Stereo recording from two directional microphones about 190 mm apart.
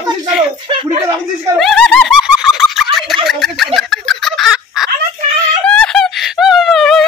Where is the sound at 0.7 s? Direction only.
25° right (ahead or behind).